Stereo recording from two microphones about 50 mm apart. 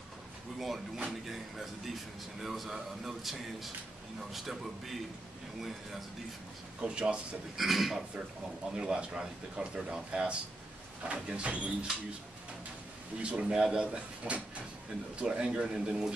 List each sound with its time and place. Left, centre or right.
1.2 s speech: centre
6.8 s speech: centre
7.5 s speech: centre
8.7 s speech: centre
13.2 s speech: right